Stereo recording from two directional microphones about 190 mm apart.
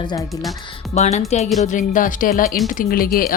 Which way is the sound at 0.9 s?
35° left (ahead or behind).